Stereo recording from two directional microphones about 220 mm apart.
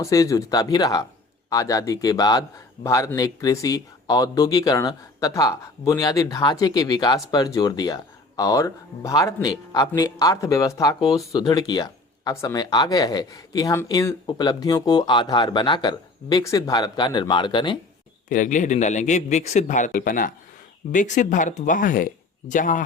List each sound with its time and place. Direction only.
0.0 s speech: 15° left (ahead or behind)
18.3 s speech: 35° left (ahead or behind)